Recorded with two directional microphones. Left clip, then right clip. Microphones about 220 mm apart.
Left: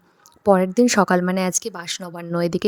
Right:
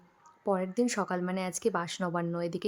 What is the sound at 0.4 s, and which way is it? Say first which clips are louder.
A woman's voice: left 13 dB; 40° left (ahead or behind).